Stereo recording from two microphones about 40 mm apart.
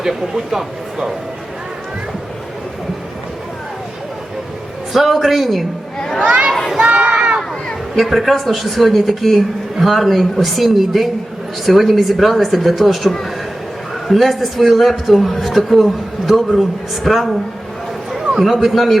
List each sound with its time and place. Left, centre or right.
0.0 s speech: centre
4.9 s a man's voice: centre
6.2 s a sound: centre
6.7 s crowd: right
7.9 s a man's voice: centre
18.3 s a man's voice: centre